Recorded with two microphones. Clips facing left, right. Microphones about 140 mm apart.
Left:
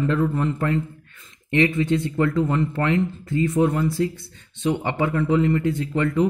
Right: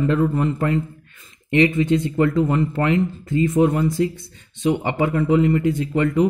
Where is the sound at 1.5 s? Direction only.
15° right (ahead or behind).